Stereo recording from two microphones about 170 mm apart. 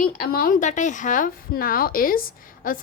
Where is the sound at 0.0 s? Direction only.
55° left (ahead or behind).